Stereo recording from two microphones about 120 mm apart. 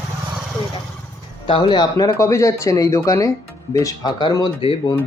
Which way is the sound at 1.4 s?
45° left (ahead or behind).